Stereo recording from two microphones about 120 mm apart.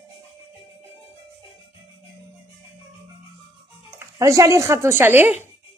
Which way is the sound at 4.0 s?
25° right (ahead or behind).